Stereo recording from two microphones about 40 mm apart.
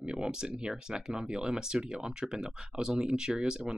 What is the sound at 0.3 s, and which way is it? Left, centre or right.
Speech, right.